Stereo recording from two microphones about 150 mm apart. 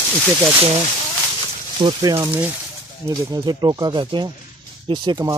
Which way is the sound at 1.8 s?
30° right (ahead or behind).